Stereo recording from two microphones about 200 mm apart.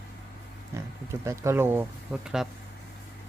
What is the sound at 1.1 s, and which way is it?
Speech, 15° right (ahead or behind).